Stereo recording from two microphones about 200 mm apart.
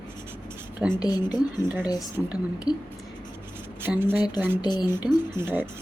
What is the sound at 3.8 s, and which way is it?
Speech, 10° right (ahead or behind).